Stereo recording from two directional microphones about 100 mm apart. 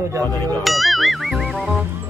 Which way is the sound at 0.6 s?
Centre (ahead or behind).